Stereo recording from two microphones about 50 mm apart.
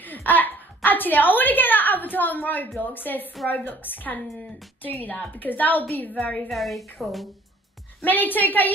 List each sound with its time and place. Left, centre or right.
0.0 s a woman's voice: left
6.5 s a woman's voice: centre
8.0 s a woman's voice: left